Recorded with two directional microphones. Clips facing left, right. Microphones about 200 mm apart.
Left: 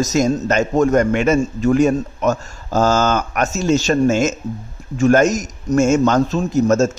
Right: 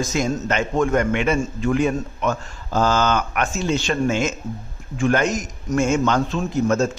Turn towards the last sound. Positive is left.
turn(degrees=40)  # may be behind; listen again after turning